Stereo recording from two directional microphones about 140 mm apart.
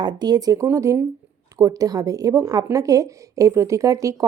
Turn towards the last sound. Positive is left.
turn(degrees=-25)  # may be behind; listen again after turning